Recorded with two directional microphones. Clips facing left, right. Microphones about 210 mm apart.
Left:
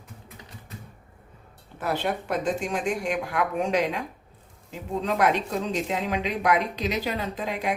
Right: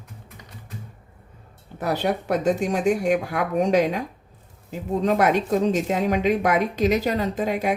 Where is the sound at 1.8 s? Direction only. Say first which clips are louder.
Right 4 dB; 40° right (ahead or behind).